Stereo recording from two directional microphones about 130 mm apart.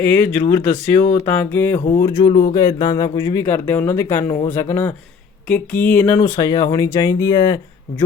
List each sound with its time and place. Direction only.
0.0 s speech: 15° left (ahead or behind)
1.0 s music: 55° left (ahead or behind)
1.3 s speech: 15° left (ahead or behind)
1.9 s speech: 25° left (ahead or behind)